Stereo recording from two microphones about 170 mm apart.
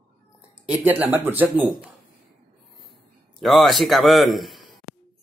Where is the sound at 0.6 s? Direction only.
10° right (ahead or behind).